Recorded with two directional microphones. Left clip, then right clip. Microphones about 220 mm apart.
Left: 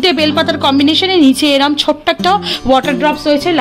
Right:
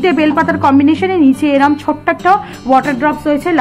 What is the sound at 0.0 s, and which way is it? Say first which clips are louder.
A woman's voice: even; 50° left (ahead or behind).